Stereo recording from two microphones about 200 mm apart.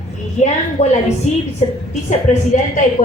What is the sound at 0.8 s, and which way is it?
Speech, 30° left (ahead or behind).